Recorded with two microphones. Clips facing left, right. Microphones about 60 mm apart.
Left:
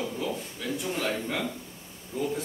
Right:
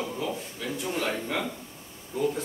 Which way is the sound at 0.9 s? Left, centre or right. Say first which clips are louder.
Right 2 dB; centre.